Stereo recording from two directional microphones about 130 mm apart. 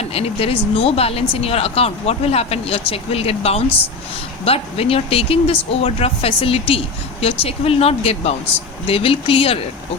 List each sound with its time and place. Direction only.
0.0 s speech: 50° left (ahead or behind)